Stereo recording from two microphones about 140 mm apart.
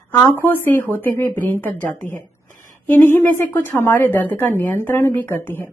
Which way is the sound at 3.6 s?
20° left (ahead or behind).